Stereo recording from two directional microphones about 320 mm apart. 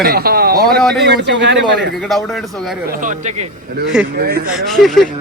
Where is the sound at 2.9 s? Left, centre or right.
Right.